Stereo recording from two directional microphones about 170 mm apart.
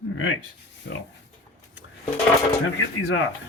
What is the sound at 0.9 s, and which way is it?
Speech, 90° left.